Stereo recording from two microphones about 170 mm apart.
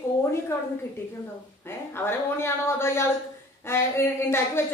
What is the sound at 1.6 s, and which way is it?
A woman's voice, 15° left (ahead or behind).